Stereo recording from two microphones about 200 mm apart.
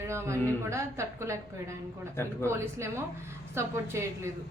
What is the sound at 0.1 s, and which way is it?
A woman's voice, 15° right (ahead or behind).